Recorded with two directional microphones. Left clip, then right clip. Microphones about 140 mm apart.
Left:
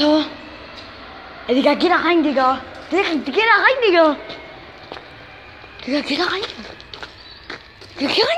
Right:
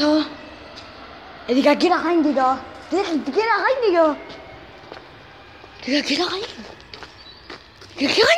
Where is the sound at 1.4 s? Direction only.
20° right (ahead or behind).